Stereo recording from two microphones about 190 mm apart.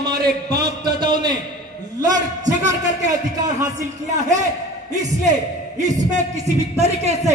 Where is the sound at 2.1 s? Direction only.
40° right (ahead or behind).